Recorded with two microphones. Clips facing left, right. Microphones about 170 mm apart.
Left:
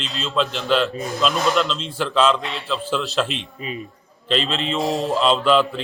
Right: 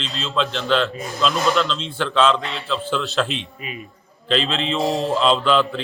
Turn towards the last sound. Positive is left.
turn(degrees=0)  # may be behind; listen again after turning